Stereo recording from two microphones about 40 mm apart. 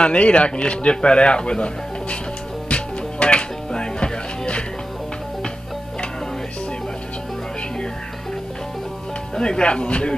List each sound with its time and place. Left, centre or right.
0.0 s speech: left
2.7 s music: left
9.3 s speech: left